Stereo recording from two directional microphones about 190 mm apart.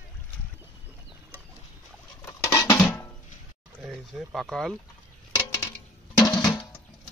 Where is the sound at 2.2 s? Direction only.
15° left (ahead or behind).